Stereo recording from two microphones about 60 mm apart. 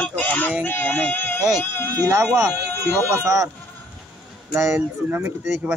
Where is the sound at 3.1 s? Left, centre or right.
Right.